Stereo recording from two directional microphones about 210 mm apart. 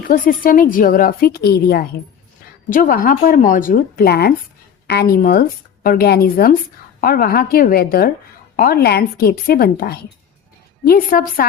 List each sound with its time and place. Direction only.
0.1 s a woman's voice: 40° left (ahead or behind)